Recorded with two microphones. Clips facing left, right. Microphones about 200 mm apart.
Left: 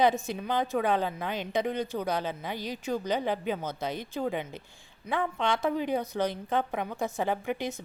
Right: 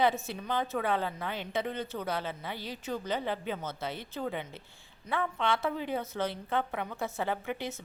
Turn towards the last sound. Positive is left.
turn(degrees=15)  # may be behind; listen again after turning